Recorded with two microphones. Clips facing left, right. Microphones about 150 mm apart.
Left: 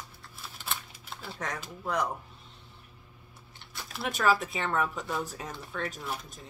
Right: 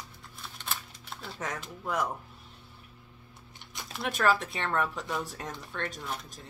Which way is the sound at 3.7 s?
20° right (ahead or behind).